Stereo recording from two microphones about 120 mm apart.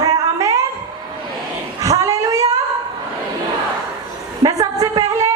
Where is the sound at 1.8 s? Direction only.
30° right (ahead or behind).